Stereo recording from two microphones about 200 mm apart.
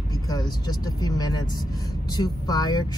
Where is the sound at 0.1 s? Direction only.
20° left (ahead or behind).